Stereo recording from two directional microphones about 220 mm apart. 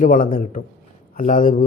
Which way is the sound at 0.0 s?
35° left (ahead or behind).